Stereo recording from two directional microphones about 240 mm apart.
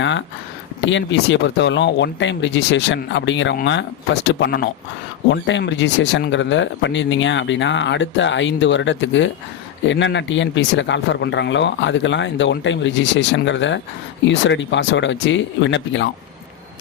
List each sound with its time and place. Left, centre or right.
0.0 s speech: left